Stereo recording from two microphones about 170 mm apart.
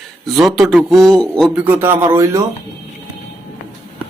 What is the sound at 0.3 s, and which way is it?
A man's voice, centre (ahead or behind).